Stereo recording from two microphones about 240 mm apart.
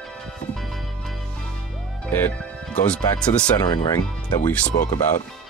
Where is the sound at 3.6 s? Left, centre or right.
Centre.